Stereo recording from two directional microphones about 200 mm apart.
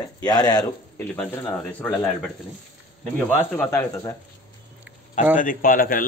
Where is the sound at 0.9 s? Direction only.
5° left (ahead or behind).